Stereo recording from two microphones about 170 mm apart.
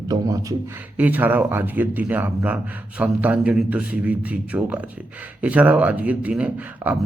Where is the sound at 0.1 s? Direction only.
20° right (ahead or behind).